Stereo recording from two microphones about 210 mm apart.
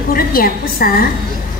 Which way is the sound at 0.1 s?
45° left (ahead or behind).